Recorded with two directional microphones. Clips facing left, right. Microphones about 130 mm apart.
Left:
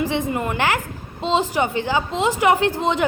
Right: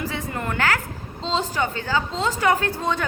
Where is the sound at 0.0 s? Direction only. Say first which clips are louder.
Left 6 dB; 15° left (ahead or behind).